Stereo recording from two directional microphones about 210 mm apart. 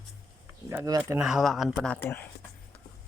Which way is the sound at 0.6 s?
15° right (ahead or behind).